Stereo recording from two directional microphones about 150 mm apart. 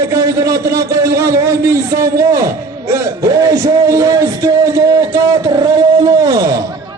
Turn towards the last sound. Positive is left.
turn(degrees=-25)  # may be behind; listen again after turning